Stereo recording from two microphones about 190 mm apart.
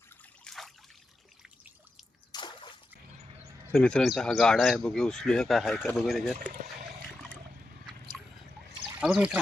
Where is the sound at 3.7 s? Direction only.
5° left (ahead or behind).